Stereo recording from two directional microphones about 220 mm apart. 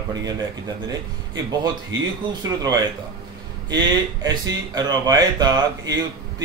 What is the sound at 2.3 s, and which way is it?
Speech, 15° right (ahead or behind).